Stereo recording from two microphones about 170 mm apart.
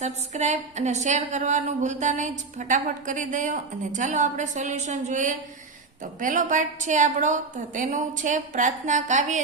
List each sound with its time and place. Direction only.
0.0 s a woman's voice: 45° right (ahead or behind)